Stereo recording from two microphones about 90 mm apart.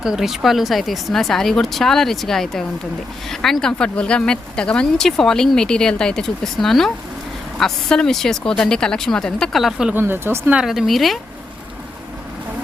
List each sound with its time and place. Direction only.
0.0 s speech: 5° right (ahead or behind)
9.9 s speech: 25° right (ahead or behind)
10.5 s speech: 5° right (ahead or behind)